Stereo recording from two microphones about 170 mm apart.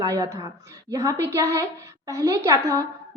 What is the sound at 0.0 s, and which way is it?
A woman's voice, 20° right (ahead or behind).